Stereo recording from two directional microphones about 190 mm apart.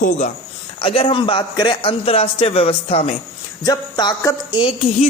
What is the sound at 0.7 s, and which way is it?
Speech, 30° left (ahead or behind).